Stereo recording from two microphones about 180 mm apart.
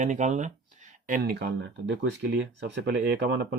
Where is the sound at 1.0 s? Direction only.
55° right (ahead or behind).